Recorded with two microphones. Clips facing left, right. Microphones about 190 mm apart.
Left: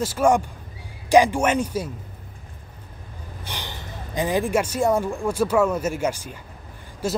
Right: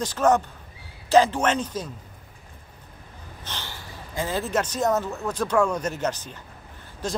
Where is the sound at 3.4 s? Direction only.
15° left (ahead or behind).